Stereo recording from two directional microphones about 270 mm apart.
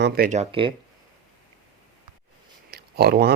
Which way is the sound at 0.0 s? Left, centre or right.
Right.